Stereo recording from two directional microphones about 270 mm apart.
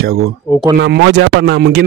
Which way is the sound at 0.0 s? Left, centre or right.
Right.